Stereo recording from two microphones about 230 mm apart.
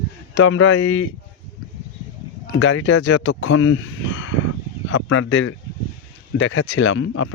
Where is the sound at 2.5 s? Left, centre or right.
Left.